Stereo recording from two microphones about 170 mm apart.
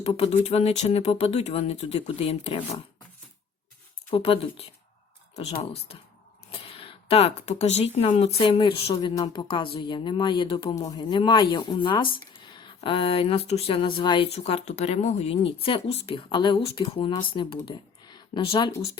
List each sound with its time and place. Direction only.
0.0 s speech: 35° left (ahead or behind)
4.1 s speech: 35° left (ahead or behind)
5.9 s speech: 35° left (ahead or behind)